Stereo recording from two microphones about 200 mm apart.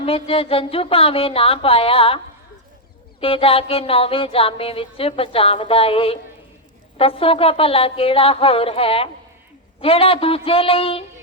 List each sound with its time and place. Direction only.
0.0 s music: 30° left (ahead or behind)